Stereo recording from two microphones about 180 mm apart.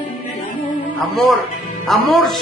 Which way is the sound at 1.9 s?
Centre (ahead or behind).